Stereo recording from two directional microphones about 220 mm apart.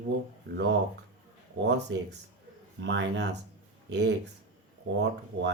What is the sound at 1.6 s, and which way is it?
Speech, 50° right (ahead or behind).